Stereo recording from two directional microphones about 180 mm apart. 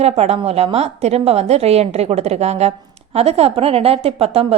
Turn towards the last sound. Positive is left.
turn(degrees=-35)  # may be behind; listen again after turning